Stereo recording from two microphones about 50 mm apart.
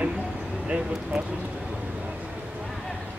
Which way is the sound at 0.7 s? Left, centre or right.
Centre.